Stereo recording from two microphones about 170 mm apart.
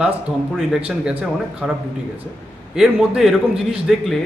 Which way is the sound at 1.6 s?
5° right (ahead or behind).